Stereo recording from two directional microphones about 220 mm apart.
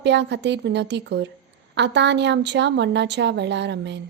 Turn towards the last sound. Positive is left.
turn(degrees=-50)  # may be behind; listen again after turning